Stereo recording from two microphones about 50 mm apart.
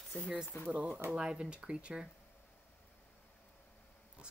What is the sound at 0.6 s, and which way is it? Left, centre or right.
Speech, right.